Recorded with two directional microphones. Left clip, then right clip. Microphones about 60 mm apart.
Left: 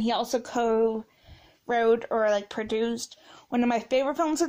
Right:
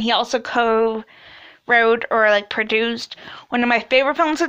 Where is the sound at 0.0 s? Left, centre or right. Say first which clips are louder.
Right 8 dB; left.